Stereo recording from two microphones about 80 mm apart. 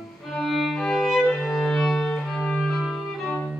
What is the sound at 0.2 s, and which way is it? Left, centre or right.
Music, centre.